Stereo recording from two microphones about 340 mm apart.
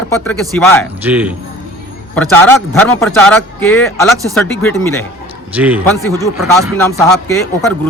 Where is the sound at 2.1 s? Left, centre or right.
Centre.